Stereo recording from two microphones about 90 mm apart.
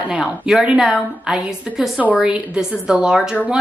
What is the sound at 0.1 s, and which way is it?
A woman's voice, 10° right (ahead or behind).